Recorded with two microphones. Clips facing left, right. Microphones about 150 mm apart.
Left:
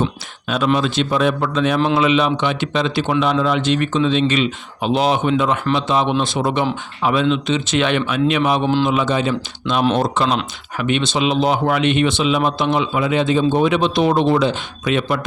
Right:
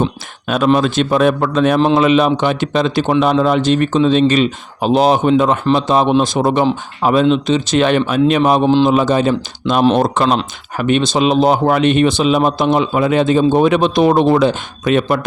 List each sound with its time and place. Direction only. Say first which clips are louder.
0.4 s speech: right 5 dB; 50° right (ahead or behind)
9.9 s speech: right 4 dB; 55° right (ahead or behind)
10.8 s speech: right 5 dB; 40° right (ahead or behind)